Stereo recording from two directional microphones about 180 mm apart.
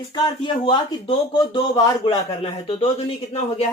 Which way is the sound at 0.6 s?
30° left (ahead or behind).